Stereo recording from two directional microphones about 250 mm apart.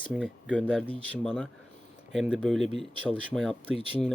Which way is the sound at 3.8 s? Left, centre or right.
Left.